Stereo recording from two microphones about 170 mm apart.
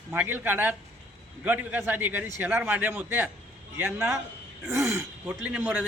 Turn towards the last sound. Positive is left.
turn(degrees=-10)  # may be behind; listen again after turning